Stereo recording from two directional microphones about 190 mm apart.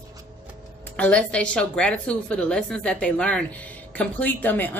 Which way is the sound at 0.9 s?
5° left (ahead or behind).